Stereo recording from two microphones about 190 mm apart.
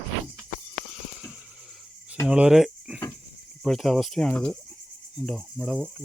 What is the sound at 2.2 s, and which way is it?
Cricket, 5° right (ahead or behind).